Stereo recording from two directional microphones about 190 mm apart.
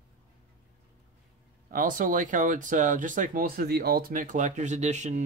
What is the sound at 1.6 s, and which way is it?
Speech, 45° right (ahead or behind).